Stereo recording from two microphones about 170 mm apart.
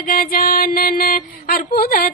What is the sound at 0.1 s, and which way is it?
Music, 55° left (ahead or behind).